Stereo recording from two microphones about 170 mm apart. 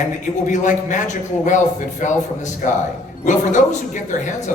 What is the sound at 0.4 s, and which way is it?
A man's voice, 50° left (ahead or behind).